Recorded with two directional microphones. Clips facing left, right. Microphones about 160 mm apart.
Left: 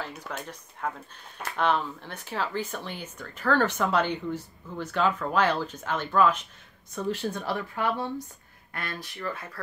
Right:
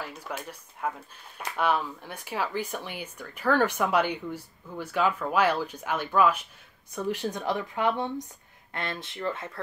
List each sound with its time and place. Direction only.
0.0 s speech: 10° right (ahead or behind)